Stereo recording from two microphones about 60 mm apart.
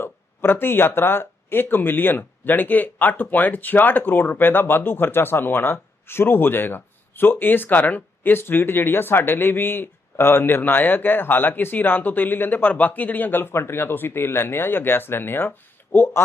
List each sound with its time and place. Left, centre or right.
0.0 s speech: left